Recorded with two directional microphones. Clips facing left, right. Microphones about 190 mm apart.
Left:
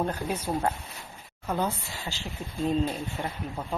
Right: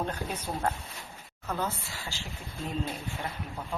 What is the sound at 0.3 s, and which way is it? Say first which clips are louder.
A woman's voice: left 4 dB; 10° left (ahead or behind).